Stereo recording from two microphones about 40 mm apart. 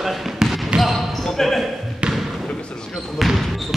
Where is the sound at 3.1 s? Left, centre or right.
Centre.